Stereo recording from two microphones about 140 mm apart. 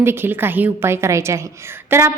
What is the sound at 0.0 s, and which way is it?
A woman's voice, 15° right (ahead or behind).